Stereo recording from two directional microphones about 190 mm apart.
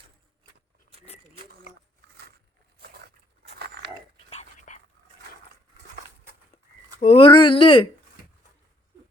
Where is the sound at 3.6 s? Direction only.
60° right (ahead or behind).